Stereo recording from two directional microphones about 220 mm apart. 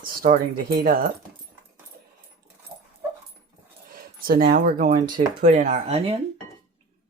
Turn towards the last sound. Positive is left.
turn(degrees=-25)  # may be behind; listen again after turning